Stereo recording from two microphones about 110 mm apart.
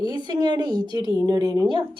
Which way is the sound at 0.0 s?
40° right (ahead or behind).